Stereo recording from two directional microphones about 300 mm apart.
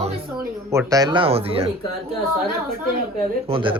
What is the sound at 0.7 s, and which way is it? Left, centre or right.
Speech, centre.